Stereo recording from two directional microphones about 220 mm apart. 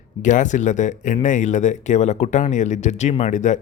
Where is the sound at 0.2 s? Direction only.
35° left (ahead or behind).